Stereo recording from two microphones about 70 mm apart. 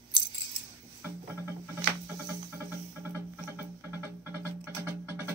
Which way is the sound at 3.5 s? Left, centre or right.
Right.